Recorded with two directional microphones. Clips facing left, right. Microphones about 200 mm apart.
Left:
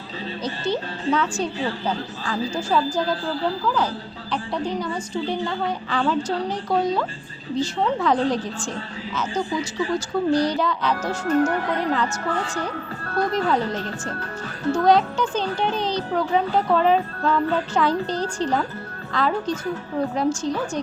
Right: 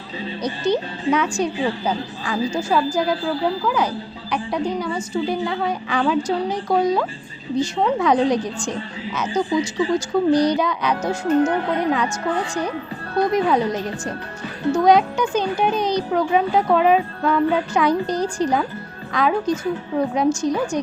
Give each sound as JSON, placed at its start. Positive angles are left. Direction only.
{"t": 0.4, "sound": "a woman's voice", "side_deg": -15}
{"t": 13.1, "sound": "a woman's voice", "side_deg": -15}